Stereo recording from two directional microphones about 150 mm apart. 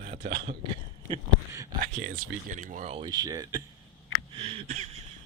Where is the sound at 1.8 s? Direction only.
65° right (ahead or behind); by 3.1 s 45° right (ahead or behind).